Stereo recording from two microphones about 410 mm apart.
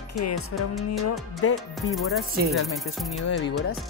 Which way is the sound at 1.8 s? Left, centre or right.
Centre.